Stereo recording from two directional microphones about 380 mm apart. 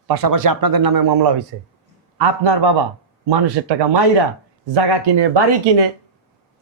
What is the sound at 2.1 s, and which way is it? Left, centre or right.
A man's voice, right.